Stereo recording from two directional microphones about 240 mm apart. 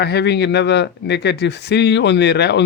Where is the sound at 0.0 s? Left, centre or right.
Left.